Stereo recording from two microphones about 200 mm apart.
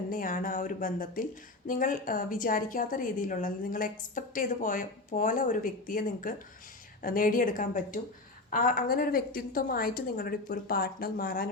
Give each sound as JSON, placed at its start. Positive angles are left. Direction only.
{"t": 0.1, "sound": "speech", "side_deg": 45}